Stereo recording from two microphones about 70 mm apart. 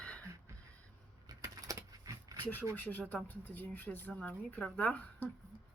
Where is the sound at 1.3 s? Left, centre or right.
Right.